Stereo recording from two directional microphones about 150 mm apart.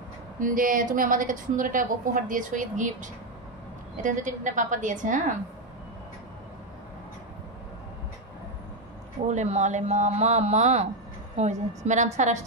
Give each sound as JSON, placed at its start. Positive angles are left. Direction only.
{"t": 0.4, "sound": "a woman's voice", "side_deg": -65}
{"t": 9.3, "sound": "speech", "side_deg": -50}